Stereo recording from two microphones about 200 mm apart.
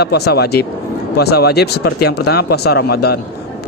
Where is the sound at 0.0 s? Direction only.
55° left (ahead or behind).